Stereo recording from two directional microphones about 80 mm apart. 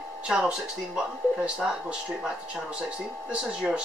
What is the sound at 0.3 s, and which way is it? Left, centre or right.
Speech, centre.